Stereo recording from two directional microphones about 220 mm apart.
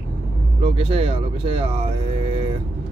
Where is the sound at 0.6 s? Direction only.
25° right (ahead or behind).